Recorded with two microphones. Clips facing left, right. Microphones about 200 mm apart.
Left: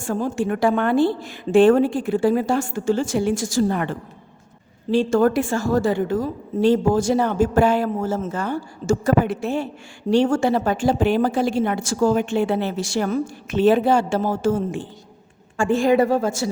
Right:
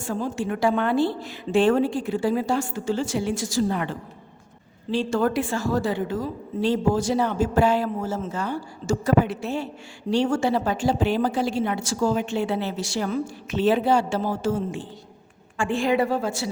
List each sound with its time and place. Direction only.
0.0 s a woman's voice: 50° left (ahead or behind)